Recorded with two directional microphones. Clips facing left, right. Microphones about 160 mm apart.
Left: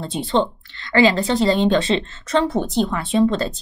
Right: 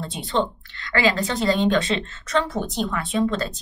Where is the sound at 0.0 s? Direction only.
30° left (ahead or behind).